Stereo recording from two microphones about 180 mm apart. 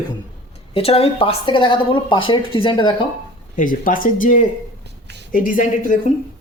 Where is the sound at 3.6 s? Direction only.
50° left (ahead or behind).